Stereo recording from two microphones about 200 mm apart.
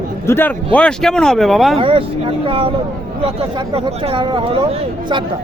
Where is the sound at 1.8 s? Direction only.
25° right (ahead or behind).